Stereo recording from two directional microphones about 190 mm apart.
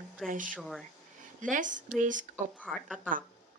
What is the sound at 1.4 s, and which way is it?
Speech, 45° right (ahead or behind).